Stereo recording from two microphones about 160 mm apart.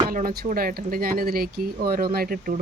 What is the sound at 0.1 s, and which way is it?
Speech, 55° right (ahead or behind).